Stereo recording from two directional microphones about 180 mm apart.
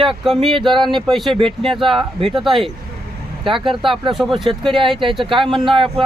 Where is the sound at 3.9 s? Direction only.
Centre (ahead or behind).